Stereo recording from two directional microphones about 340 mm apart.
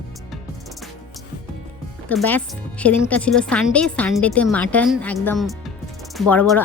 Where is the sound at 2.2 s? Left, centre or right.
Centre.